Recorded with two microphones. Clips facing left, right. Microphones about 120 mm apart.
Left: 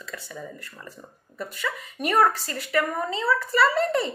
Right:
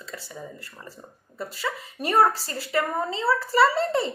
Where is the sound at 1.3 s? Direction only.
30° right (ahead or behind).